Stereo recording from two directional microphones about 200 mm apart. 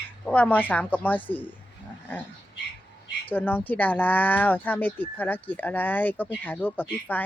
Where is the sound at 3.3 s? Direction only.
10° left (ahead or behind).